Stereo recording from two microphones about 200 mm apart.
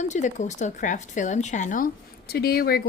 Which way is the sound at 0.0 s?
35° left (ahead or behind).